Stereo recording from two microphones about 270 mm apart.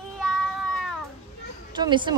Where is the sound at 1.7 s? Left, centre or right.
Centre.